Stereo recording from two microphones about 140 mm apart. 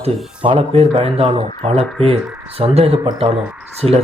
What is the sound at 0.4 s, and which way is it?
Speech, 40° right (ahead or behind).